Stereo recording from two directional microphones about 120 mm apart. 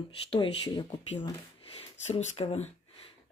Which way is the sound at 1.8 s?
65° left (ahead or behind).